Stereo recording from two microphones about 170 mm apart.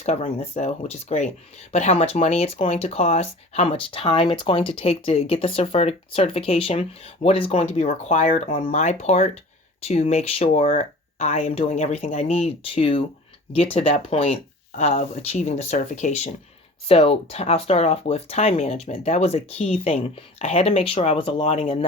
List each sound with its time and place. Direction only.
0.0 s speech: 40° left (ahead or behind)